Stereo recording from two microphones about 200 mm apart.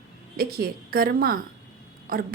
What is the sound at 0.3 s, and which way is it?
A woman's voice, 50° right (ahead or behind).